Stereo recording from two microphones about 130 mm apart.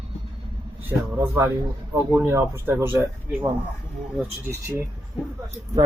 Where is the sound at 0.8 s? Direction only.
20° right (ahead or behind).